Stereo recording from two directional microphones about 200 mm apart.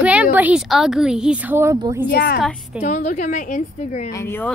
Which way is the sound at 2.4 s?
Centre (ahead or behind).